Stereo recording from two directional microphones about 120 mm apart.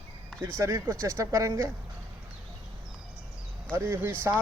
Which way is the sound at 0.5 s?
25° right (ahead or behind).